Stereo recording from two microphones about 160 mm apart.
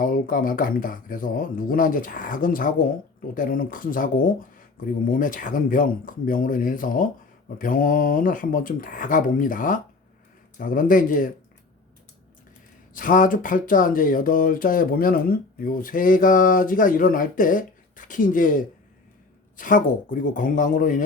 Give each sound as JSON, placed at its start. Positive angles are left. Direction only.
{"t": 0.0, "sound": "speech", "side_deg": 60}
{"t": 12.9, "sound": "speech", "side_deg": 55}